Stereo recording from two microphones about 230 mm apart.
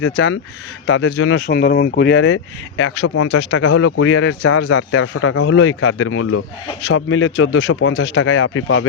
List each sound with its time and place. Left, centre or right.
0.0 s speech: left